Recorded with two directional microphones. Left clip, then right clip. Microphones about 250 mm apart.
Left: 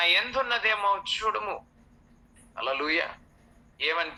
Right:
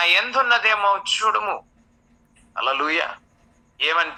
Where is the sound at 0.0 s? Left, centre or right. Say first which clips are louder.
Right 6 dB; centre.